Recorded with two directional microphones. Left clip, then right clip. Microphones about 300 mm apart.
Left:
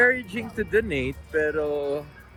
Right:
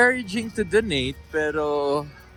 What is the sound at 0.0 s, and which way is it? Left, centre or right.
Speech, centre.